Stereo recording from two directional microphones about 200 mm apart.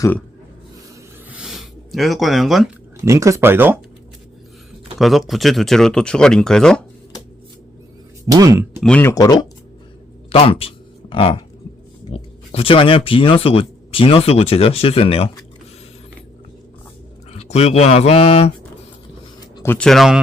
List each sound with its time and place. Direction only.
1.3 s a sound: centre (ahead or behind)
3.0 s speech: 15° right (ahead or behind)
4.9 s speech: centre (ahead or behind)
8.3 s speech: 15° right (ahead or behind)
8.8 s speech: 10° left (ahead or behind); by 15.3 s 30° left (ahead or behind)
17.3 s speech: 30° left (ahead or behind)
19.5 s speech: 10° left (ahead or behind)